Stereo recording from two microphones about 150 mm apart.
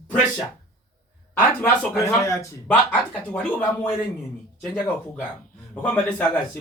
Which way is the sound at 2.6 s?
5° left (ahead or behind).